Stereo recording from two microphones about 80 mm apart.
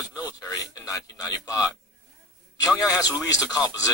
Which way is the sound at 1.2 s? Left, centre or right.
Left.